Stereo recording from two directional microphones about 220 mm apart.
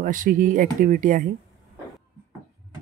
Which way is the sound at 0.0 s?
40° right (ahead or behind).